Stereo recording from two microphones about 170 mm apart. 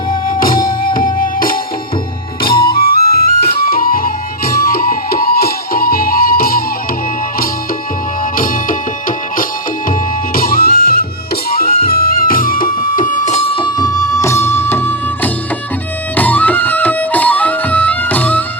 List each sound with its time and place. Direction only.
0.1 s music: 55° left (ahead or behind)
2.7 s music: 60° left (ahead or behind)
10.3 s music: 60° left (ahead or behind); by 18.4 s 10° left (ahead or behind)